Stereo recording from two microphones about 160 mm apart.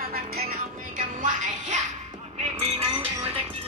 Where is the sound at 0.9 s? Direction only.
55° right (ahead or behind).